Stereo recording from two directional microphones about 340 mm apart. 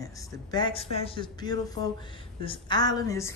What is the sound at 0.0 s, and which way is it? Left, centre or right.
A woman's voice, centre.